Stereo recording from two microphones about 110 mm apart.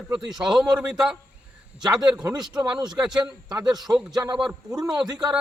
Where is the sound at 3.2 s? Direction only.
40° right (ahead or behind).